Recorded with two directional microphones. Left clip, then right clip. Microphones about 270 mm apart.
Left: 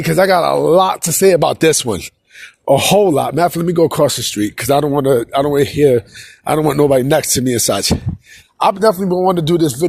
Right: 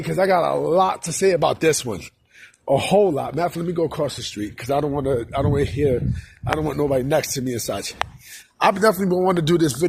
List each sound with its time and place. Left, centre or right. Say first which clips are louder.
0.0 s speech: left 7 dB; left
8.5 s speech: left 5 dB; centre